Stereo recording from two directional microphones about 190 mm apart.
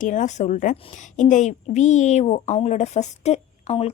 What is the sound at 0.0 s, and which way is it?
A woman's voice, 40° left (ahead or behind).